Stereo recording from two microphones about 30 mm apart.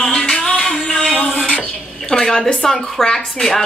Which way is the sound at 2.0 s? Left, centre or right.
Left.